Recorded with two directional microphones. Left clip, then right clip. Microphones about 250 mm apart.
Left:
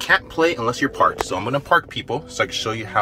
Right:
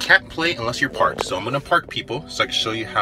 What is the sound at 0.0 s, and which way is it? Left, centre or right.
Speech, centre.